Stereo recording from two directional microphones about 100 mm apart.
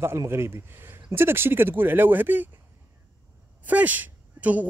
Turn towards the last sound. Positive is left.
turn(degrees=-15)  # may be behind; listen again after turning